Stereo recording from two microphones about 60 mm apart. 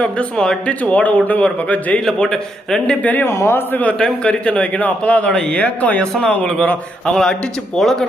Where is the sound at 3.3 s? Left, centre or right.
Left.